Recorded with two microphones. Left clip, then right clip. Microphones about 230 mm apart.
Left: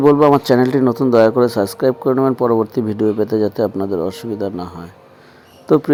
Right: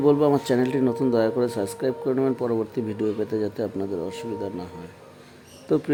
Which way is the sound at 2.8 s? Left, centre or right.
Centre.